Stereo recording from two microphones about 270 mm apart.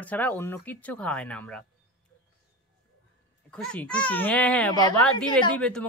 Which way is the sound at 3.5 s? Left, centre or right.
Centre.